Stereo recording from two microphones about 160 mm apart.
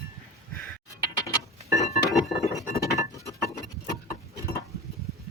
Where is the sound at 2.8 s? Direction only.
20° left (ahead or behind).